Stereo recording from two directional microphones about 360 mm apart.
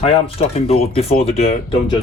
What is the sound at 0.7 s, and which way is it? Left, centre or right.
Speech, centre.